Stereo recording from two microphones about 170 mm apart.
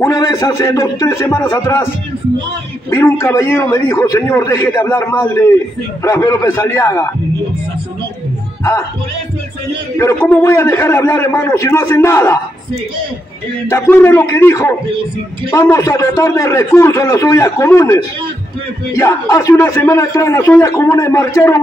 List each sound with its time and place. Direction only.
0.0 s a man's voice: 20° left (ahead or behind)
2.9 s a man's voice: 15° left (ahead or behind)
9.9 s a man's voice: 15° left (ahead or behind)
13.7 s a man's voice: 15° left (ahead or behind)